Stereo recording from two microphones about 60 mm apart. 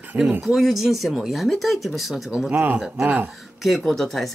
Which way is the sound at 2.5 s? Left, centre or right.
Right.